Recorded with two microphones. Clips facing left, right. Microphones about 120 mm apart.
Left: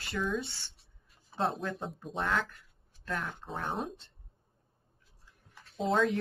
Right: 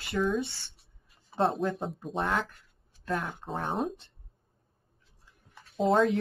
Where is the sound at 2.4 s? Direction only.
25° right (ahead or behind).